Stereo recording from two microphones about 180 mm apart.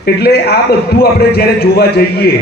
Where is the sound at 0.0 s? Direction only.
60° left (ahead or behind).